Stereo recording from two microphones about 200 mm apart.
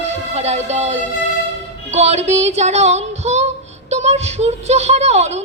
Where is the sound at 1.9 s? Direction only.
35° right (ahead or behind).